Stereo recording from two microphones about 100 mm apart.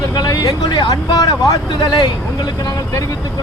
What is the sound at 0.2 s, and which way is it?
Speech, 40° left (ahead or behind).